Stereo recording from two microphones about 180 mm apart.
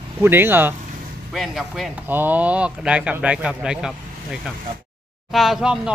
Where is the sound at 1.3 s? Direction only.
Centre (ahead or behind).